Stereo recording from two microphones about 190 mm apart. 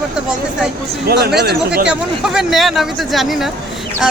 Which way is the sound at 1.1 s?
60° right (ahead or behind).